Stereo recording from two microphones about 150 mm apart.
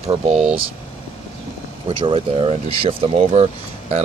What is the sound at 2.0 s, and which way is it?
Speech, 35° right (ahead or behind).